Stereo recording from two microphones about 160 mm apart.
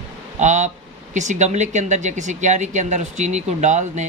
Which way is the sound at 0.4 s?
50° right (ahead or behind).